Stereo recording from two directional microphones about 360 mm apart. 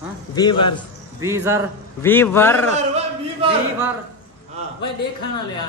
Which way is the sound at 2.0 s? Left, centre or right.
Centre.